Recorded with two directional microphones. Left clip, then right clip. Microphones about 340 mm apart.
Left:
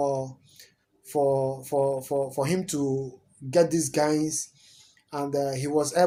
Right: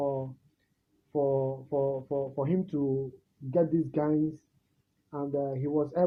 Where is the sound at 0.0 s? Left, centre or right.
Centre.